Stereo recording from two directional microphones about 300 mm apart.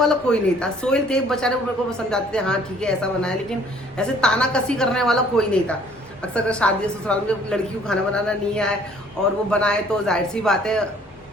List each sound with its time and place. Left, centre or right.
0.0 s speech: centre